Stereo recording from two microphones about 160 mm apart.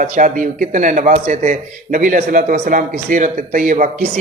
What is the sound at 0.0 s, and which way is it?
A man's voice, 55° right (ahead or behind).